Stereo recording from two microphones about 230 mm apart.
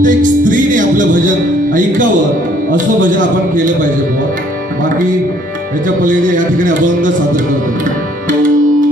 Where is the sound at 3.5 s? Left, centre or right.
Right.